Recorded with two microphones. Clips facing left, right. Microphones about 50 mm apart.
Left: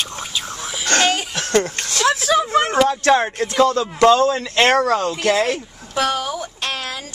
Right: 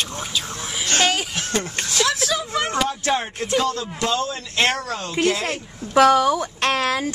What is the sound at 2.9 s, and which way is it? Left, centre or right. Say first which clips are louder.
Speech: left 7 dB; left.